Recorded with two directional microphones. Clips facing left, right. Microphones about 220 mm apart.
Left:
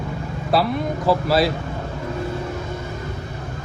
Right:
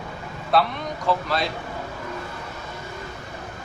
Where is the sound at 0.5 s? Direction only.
Centre (ahead or behind).